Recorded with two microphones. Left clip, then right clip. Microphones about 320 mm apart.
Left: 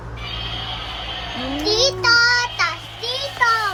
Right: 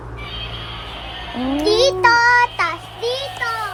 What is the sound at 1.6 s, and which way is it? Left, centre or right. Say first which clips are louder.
Child singing: right 4 dB; right.